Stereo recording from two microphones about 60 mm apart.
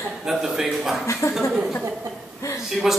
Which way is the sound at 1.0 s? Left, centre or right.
Left.